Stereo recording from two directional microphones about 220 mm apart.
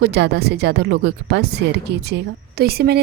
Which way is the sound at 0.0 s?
45° right (ahead or behind).